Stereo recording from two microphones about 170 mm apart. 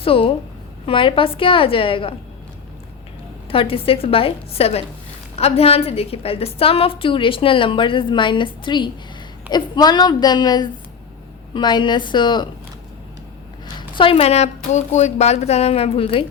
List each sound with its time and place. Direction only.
0.0 s a woman's voice: 30° left (ahead or behind)
3.5 s a woman's voice: 30° left (ahead or behind)
13.7 s a woman's voice: 30° left (ahead or behind)